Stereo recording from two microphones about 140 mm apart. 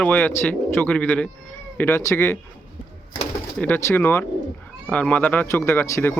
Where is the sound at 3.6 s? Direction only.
15° left (ahead or behind).